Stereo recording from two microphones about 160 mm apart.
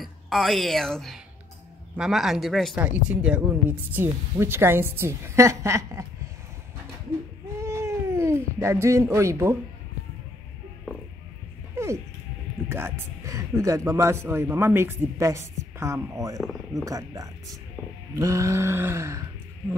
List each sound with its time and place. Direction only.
0.0 s a woman's voice: centre (ahead or behind); by 6.0 s 20° right (ahead or behind)
7.6 s a sound: 15° right (ahead or behind)
11.7 s music: 15° right (ahead or behind)
12.6 s speech: 15° right (ahead or behind)